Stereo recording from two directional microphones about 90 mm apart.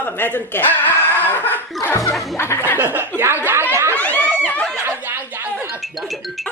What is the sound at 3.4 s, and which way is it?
Chatter, 25° right (ahead or behind).